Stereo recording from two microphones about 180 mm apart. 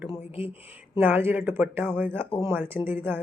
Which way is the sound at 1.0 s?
10° right (ahead or behind).